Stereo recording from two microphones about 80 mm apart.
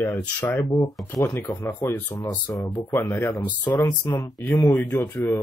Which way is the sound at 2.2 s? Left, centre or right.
Left.